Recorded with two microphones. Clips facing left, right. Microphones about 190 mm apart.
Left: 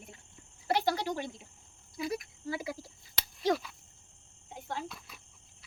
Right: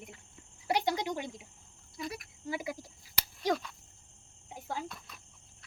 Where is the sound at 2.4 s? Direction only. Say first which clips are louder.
Right 1 dB; 20° right (ahead or behind).